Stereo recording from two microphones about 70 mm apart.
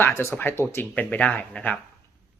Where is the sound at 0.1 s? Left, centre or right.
Left.